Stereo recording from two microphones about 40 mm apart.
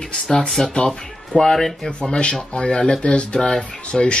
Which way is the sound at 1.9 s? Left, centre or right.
Left.